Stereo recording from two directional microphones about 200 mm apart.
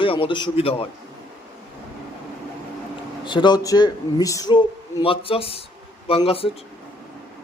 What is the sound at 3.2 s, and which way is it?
Speech, 20° left (ahead or behind).